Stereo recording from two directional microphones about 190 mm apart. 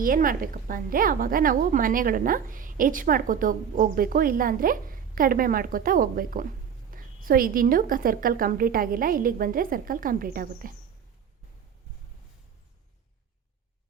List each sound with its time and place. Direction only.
0.0 s a woman's voice: 45° right (ahead or behind)